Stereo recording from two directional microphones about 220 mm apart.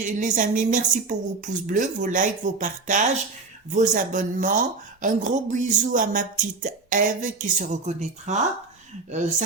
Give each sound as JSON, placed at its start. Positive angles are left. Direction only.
{"t": 0.0, "sound": "speech", "side_deg": -35}